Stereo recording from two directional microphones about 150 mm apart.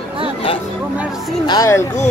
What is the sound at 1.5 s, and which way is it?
Speech, 20° left (ahead or behind).